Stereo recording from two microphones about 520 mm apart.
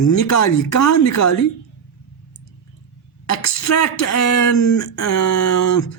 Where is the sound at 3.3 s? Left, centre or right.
Left.